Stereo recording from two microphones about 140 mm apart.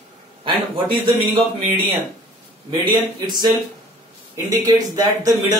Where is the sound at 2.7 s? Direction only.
30° right (ahead or behind).